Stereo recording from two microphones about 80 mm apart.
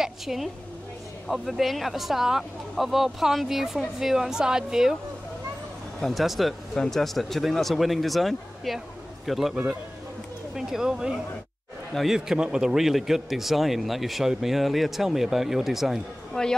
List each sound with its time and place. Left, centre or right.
0.0 s a woman's voice: centre
5.9 s speech: centre